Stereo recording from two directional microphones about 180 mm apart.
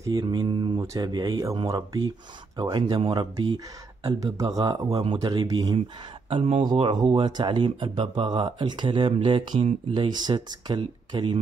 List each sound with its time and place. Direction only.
0.0 s speech: 20° right (ahead or behind)